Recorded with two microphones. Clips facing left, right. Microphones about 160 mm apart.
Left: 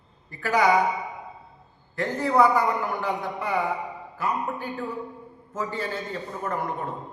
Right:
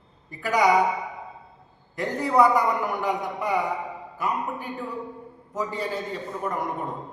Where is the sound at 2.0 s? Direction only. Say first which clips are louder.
Even; 15° right (ahead or behind).